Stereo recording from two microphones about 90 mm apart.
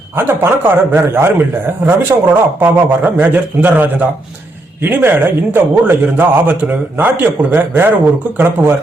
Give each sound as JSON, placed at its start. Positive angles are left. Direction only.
{"t": 0.2, "sound": "a man's voice", "side_deg": -25}